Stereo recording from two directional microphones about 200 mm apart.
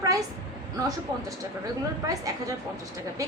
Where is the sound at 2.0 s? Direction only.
15° right (ahead or behind).